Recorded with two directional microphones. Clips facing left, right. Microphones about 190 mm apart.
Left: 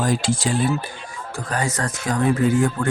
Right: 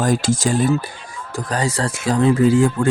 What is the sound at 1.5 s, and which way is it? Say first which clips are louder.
Speech: right 3 dB; 30° right (ahead or behind).